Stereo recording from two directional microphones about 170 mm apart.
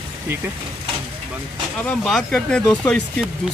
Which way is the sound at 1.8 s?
5° left (ahead or behind).